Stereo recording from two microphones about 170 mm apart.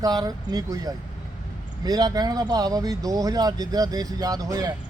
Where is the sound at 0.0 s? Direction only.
20° right (ahead or behind).